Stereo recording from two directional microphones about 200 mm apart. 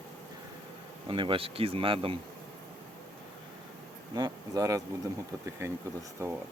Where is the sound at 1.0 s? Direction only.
25° right (ahead or behind).